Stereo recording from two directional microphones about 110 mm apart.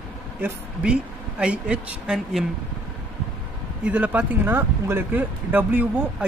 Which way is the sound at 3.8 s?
10° right (ahead or behind).